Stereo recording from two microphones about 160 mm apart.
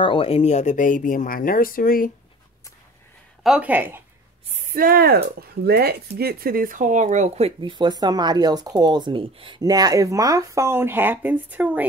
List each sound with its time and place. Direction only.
0.0 s speech: 35° left (ahead or behind); by 2.0 s 65° left (ahead or behind)
3.4 s speech: 10° right (ahead or behind)
4.5 s speech: 60° right (ahead or behind); by 11.8 s 10° right (ahead or behind)